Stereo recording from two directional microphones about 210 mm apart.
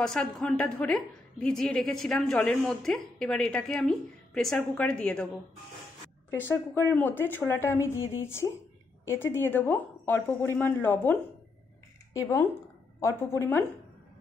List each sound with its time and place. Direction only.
0.0 s a woman's voice: 5° left (ahead or behind)
6.3 s a woman's voice: 10° left (ahead or behind)